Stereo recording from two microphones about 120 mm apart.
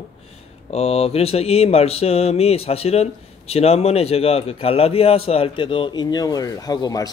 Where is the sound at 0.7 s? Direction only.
60° left (ahead or behind).